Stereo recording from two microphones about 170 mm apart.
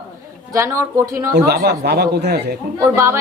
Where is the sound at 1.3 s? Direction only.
70° right (ahead or behind).